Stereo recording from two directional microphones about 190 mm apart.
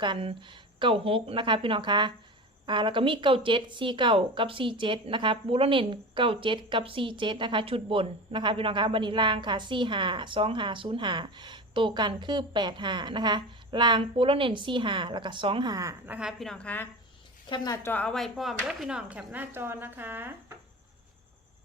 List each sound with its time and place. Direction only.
0.0 s a woman's voice: 25° right (ahead or behind); by 16.9 s 10° left (ahead or behind)
17.5 s a woman's voice: 25° left (ahead or behind)
17.8 s speech: 5° left (ahead or behind); by 20.3 s 10° right (ahead or behind)